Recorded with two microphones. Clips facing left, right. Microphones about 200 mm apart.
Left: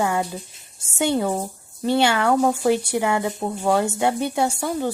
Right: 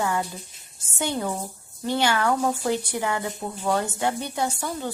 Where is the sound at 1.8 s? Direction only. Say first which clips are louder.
Left 4 dB; 20° left (ahead or behind).